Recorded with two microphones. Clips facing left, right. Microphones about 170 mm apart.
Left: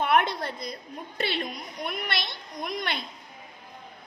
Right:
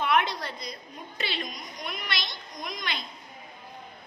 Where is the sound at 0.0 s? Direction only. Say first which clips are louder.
Left 2 dB; 50° left (ahead or behind).